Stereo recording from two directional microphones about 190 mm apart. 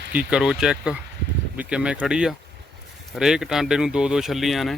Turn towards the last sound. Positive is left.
turn(degrees=0)  # may be behind; listen again after turning